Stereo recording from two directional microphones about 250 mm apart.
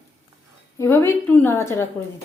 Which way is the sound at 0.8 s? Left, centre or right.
Centre.